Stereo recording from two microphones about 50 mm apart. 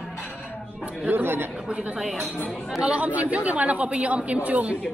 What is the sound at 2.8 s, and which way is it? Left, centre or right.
A woman's voice, right.